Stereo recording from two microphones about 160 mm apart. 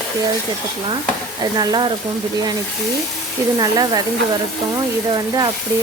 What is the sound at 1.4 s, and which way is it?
Speech, 25° right (ahead or behind).